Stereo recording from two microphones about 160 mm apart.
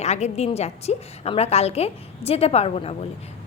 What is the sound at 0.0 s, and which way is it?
A woman's voice, 45° left (ahead or behind).